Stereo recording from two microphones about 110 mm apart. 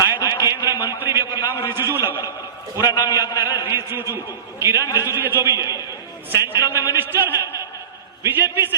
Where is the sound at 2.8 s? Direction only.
35° left (ahead or behind).